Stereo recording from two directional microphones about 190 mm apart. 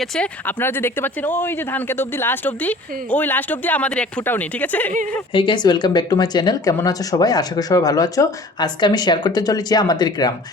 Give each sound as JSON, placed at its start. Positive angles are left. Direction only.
{"t": 0.0, "sound": "speech", "side_deg": 5}
{"t": 5.3, "sound": "speech", "side_deg": 25}